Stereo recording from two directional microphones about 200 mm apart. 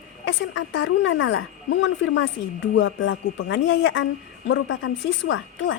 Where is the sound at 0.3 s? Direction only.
65° left (ahead or behind).